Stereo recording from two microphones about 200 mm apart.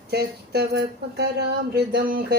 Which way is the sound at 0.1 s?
50° right (ahead or behind).